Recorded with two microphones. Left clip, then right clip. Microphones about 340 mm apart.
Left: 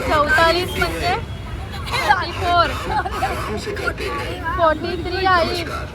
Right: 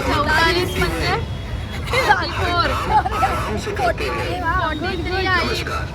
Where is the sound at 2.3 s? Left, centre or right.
Centre.